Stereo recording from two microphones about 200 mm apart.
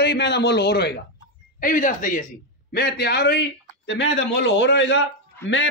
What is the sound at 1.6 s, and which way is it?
Speech, 40° left (ahead or behind).